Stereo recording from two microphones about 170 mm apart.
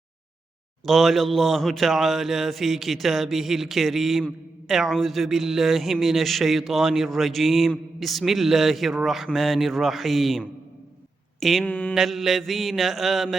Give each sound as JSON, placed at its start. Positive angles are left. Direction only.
{"t": 0.9, "sound": "speech", "side_deg": 0}
{"t": 11.3, "sound": "a sound", "side_deg": 0}
{"t": 11.9, "sound": "speech", "side_deg": 0}